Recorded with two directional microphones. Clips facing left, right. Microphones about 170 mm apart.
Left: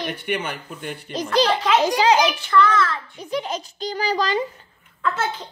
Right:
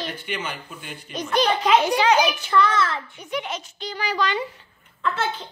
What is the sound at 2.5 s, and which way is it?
Speech, 20° right (ahead or behind).